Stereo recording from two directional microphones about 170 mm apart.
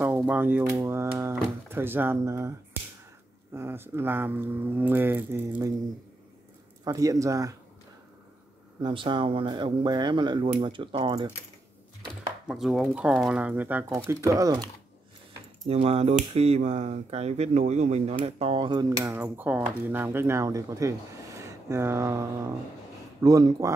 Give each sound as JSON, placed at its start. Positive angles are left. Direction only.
{"t": 0.0, "sound": "speech", "side_deg": -10}
{"t": 3.5, "sound": "speech", "side_deg": -15}
{"t": 6.8, "sound": "speech", "side_deg": -20}
{"t": 8.8, "sound": "speech", "side_deg": -30}
{"t": 12.4, "sound": "speech", "side_deg": 0}
{"t": 15.6, "sound": "speech", "side_deg": -35}